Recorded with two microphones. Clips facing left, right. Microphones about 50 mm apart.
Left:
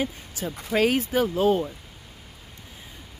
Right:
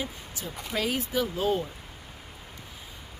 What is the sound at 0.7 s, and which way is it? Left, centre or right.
Speech, left.